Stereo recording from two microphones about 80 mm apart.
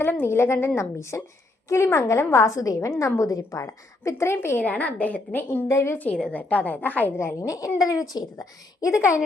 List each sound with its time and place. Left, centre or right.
0.0 s a woman's voice: left
4.6 s a woman's voice: centre; by 6.0 s left
6.0 s a woman's voice: centre
7.2 s a woman's voice: left